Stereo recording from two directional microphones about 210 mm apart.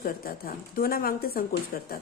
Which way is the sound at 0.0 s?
45° left (ahead or behind).